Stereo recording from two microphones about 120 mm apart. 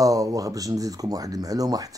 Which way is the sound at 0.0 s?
30° right (ahead or behind).